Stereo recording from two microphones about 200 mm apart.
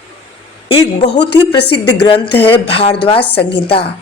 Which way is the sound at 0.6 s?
30° left (ahead or behind).